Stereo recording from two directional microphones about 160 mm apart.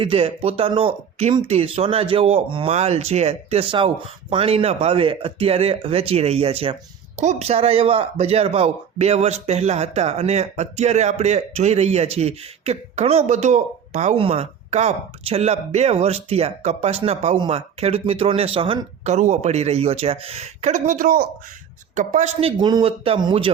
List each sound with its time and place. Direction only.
0.0 s speech: 35° right (ahead or behind)
19.1 s speech: 45° right (ahead or behind); by 21.2 s 60° right (ahead or behind)
21.9 s speech: 50° right (ahead or behind); by 23.5 s 35° right (ahead or behind)